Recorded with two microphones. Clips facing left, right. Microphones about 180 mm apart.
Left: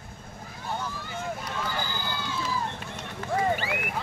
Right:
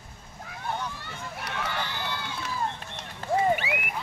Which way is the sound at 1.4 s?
70° right (ahead or behind).